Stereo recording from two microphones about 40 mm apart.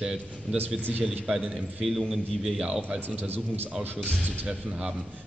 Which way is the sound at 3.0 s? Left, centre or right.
Right.